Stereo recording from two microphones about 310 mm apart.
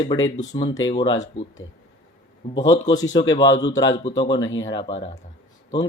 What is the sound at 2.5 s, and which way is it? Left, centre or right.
Speech, centre.